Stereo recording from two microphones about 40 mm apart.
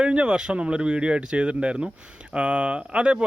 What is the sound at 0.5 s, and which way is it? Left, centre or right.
Speech, right.